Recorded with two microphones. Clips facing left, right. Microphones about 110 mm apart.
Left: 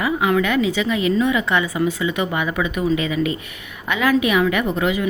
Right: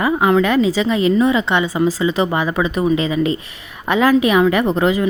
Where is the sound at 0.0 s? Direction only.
35° right (ahead or behind).